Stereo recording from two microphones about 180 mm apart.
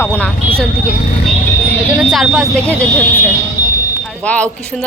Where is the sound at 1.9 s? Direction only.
5° right (ahead or behind).